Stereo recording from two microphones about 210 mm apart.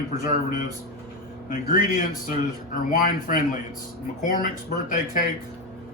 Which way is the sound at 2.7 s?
40° left (ahead or behind).